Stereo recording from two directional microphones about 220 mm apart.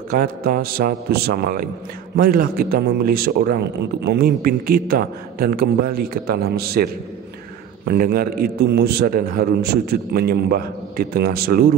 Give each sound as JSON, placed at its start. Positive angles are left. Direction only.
{"t": 0.1, "sound": "a man's voice", "side_deg": -40}